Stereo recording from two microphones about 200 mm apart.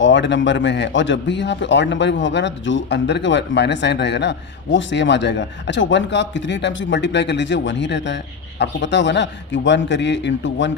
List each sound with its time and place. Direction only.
0.0 s a man's voice: 65° left (ahead or behind)